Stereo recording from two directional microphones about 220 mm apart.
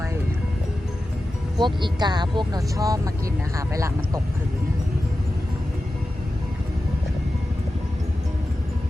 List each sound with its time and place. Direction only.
1.5 s speech: 20° right (ahead or behind)